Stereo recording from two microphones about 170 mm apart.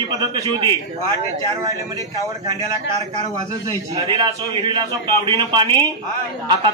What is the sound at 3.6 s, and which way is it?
A man's voice, 25° right (ahead or behind).